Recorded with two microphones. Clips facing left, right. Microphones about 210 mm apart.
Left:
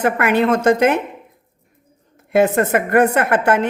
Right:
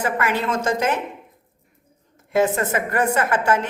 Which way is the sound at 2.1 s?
60° left (ahead or behind).